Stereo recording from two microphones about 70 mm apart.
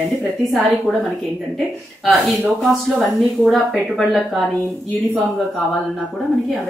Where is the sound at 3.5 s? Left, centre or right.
Centre.